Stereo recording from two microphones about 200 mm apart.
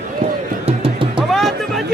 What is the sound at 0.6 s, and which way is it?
Music, 25° right (ahead or behind).